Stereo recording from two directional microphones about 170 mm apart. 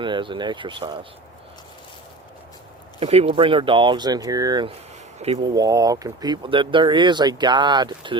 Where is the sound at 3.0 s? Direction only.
35° right (ahead or behind).